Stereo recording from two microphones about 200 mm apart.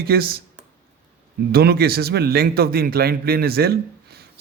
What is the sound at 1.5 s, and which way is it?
A man's voice, 50° right (ahead or behind).